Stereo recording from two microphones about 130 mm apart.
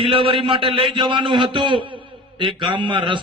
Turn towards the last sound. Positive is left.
turn(degrees=-40)  # may be behind; listen again after turning